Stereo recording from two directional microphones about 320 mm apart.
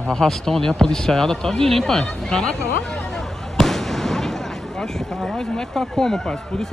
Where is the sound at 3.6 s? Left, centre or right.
Centre.